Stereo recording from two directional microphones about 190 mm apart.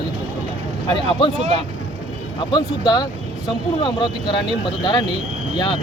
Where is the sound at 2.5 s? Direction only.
20° left (ahead or behind).